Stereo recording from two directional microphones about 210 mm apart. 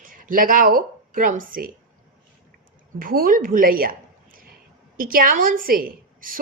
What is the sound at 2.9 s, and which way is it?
A woman's voice, 40° right (ahead or behind).